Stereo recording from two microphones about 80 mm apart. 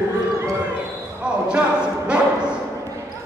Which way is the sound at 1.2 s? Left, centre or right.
Centre.